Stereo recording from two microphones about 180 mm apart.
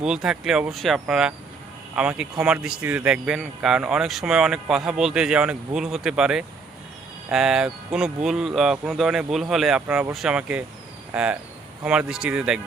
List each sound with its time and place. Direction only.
0.0 s speech: 5° right (ahead or behind)